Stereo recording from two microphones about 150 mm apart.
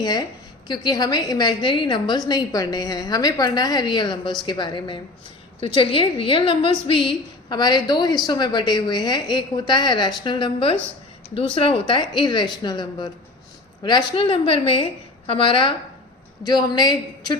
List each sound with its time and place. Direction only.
0.0 s a woman's voice: 25° left (ahead or behind)